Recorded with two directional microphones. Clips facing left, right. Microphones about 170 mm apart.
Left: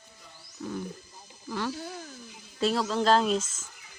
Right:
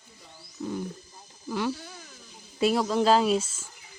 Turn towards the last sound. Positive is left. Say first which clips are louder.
# right 2 dB
turn(degrees=-10)  # may be behind; listen again after turning